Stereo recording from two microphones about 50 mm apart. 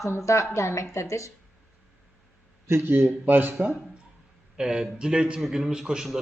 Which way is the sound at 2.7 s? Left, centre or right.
Right.